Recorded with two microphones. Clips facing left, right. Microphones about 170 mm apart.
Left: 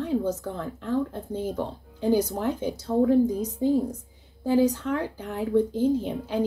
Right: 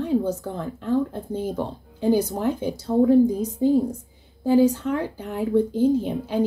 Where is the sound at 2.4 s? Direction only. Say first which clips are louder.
Right 3 dB; 10° right (ahead or behind).